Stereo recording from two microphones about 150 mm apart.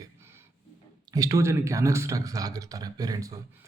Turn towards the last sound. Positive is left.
turn(degrees=-25)  # may be behind; listen again after turning